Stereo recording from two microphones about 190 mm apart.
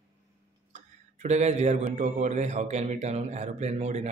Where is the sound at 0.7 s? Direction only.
35° right (ahead or behind).